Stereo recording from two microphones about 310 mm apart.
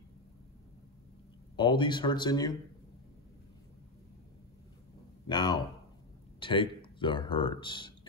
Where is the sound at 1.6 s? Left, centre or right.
Centre.